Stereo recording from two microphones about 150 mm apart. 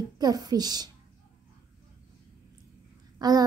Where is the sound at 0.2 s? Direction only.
25° right (ahead or behind).